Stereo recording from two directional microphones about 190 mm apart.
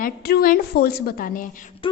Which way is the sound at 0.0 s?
50° left (ahead or behind).